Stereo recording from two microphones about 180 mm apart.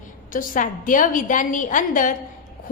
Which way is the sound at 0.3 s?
50° left (ahead or behind).